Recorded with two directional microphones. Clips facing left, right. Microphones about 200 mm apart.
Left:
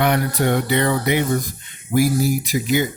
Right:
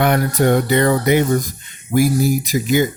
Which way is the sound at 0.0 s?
45° right (ahead or behind).